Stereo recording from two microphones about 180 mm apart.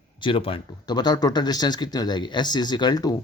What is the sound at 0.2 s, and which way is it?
Speech, 30° left (ahead or behind).